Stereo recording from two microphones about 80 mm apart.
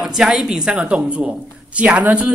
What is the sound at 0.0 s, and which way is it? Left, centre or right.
Speech, centre.